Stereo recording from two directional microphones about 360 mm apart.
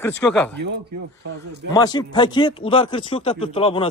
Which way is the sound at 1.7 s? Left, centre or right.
Centre.